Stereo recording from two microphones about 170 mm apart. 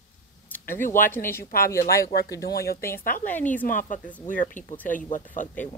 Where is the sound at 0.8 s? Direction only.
55° left (ahead or behind).